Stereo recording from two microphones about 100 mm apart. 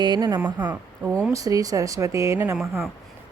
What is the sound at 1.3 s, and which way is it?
Speech, 35° right (ahead or behind).